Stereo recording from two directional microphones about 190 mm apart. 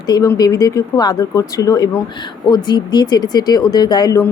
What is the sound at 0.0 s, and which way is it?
Speech, 20° left (ahead or behind).